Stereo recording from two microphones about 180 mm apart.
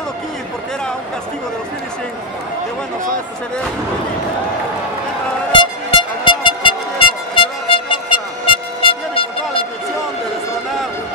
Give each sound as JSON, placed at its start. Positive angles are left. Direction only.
{"t": 5.5, "sound": "music", "side_deg": 25}